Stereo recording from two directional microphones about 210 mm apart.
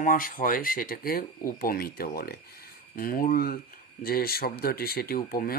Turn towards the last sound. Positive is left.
turn(degrees=45)  # may be behind; listen again after turning